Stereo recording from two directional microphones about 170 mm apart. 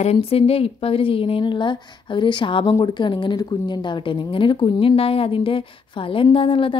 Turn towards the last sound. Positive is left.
turn(degrees=30)  # may be behind; listen again after turning